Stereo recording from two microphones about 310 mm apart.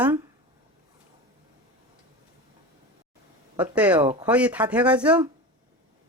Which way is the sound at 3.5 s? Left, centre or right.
Centre.